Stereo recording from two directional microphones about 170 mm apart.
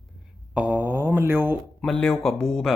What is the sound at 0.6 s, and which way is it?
Mantra, 10° right (ahead or behind).